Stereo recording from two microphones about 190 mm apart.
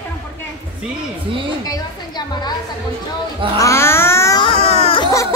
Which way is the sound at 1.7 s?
20° left (ahead or behind).